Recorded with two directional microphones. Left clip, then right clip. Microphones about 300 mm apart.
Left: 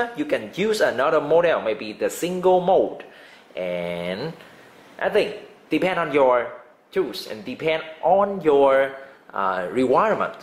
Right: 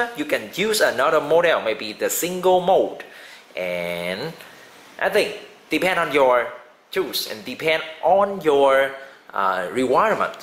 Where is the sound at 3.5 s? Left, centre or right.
Centre.